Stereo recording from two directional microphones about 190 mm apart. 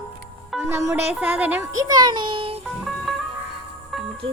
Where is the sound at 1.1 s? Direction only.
10° right (ahead or behind); by 2.6 s 30° right (ahead or behind).